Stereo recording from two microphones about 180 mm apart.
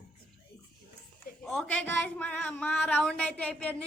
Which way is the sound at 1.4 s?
5° left (ahead or behind).